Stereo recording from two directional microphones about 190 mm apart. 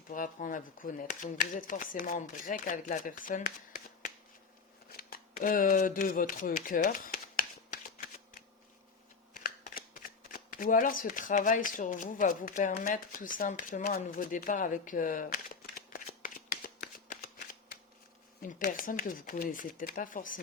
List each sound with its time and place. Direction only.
0.1 s speech: 45° left (ahead or behind)
4.9 s speech: 50° left (ahead or behind)
7.9 s shuffling cards: 45° left (ahead or behind)
18.4 s speech: 45° left (ahead or behind)